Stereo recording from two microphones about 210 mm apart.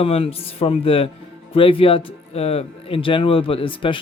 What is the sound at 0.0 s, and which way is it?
Speech, 25° left (ahead or behind).